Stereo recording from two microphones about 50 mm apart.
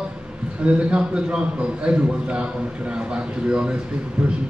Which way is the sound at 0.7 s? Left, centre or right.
Right.